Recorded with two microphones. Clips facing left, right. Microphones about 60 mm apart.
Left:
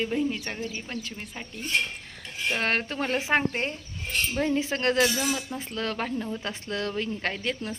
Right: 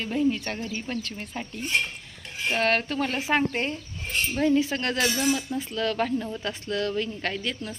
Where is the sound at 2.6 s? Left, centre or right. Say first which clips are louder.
Right 5 dB; left.